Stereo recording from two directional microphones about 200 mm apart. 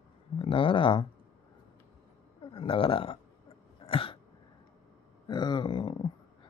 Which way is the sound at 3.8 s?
25° left (ahead or behind).